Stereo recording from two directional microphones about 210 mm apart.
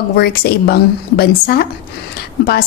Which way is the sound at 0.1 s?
45° left (ahead or behind).